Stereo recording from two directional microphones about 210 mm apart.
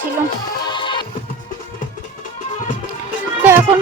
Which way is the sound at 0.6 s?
20° left (ahead or behind).